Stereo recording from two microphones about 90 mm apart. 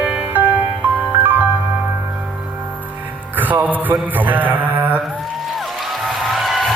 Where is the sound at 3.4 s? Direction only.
20° right (ahead or behind).